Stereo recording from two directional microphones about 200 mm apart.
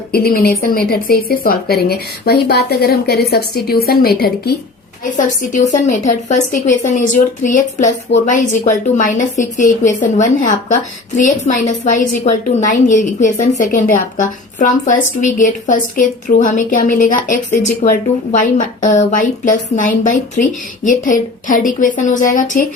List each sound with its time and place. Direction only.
0.1 s a woman's voice: 50° left (ahead or behind)
5.1 s a woman's voice: 40° left (ahead or behind)